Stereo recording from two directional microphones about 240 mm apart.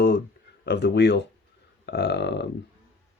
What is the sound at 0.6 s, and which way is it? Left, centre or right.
Speech, left.